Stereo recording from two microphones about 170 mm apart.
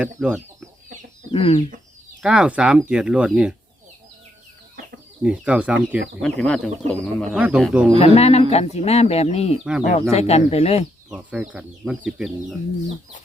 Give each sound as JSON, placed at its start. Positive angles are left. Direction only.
{"t": 0.2, "sound": "speech", "side_deg": -5}
{"t": 1.3, "sound": "speech", "side_deg": 35}
{"t": 2.2, "sound": "speech", "side_deg": -5}
{"t": 5.2, "sound": "speech", "side_deg": -5}
{"t": 6.2, "sound": "speech", "side_deg": 5}
{"t": 7.3, "sound": "speech", "side_deg": -10}
{"t": 7.9, "sound": "speech", "side_deg": 35}
{"t": 11.1, "sound": "speech", "side_deg": -5}